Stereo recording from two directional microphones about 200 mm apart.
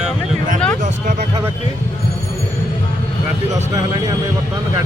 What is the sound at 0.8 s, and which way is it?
Speech, 40° right (ahead or behind).